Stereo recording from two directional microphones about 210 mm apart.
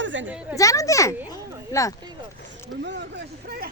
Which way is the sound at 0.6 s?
15° left (ahead or behind).